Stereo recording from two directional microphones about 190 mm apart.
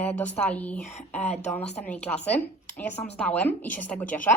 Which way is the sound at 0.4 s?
5° left (ahead or behind).